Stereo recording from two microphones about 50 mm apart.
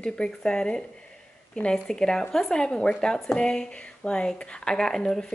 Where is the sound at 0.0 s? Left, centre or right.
Centre.